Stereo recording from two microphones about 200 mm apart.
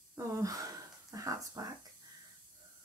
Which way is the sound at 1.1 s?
15° right (ahead or behind).